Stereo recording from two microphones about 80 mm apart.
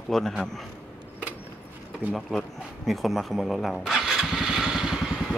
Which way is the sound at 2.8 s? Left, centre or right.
Centre.